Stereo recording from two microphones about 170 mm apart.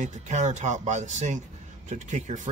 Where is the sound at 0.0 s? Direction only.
45° right (ahead or behind).